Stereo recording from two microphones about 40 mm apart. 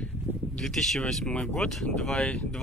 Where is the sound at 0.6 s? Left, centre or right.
Centre.